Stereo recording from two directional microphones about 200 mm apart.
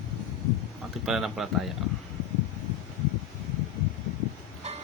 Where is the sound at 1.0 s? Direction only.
Centre (ahead or behind).